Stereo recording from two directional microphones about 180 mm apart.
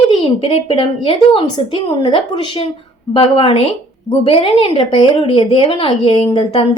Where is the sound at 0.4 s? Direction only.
30° left (ahead or behind).